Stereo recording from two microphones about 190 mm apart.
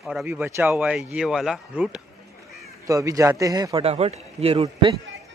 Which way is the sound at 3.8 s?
35° right (ahead or behind).